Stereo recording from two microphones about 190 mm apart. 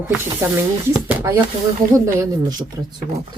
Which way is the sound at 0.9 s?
10° right (ahead or behind).